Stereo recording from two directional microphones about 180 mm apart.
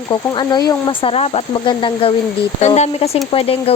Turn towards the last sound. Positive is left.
turn(degrees=30)  # may be behind; listen again after turning